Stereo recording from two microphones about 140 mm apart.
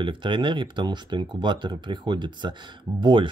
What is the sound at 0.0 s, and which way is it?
Speech, 35° right (ahead or behind).